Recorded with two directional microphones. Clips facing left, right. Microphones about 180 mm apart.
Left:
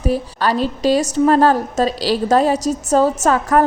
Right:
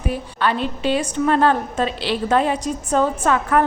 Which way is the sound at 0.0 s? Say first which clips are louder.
Left 4 dB; 40° left (ahead or behind).